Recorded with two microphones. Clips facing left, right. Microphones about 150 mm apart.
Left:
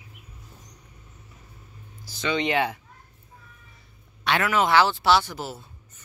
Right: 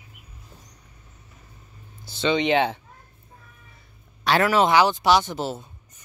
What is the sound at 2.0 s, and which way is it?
Speech, 25° right (ahead or behind).